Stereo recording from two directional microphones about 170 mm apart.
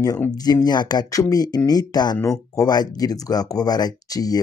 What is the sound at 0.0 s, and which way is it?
Speech, 20° left (ahead or behind).